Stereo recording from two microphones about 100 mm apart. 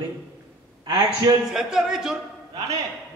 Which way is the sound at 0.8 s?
40° right (ahead or behind).